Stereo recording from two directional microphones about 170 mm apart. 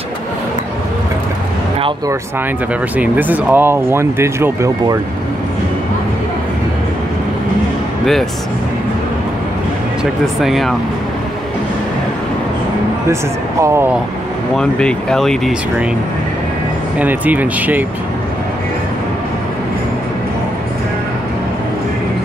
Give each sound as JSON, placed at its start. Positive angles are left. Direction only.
{"t": 3.0, "sound": "speech", "side_deg": -10}
{"t": 8.0, "sound": "speech", "side_deg": 0}
{"t": 10.2, "sound": "speech", "side_deg": 0}
{"t": 13.1, "sound": "speech", "side_deg": -15}
{"t": 14.6, "sound": "speech", "side_deg": 5}
{"t": 17.0, "sound": "speech", "side_deg": -10}